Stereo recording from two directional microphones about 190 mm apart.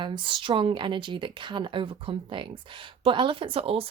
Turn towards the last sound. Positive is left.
turn(degrees=-30)  # may be behind; listen again after turning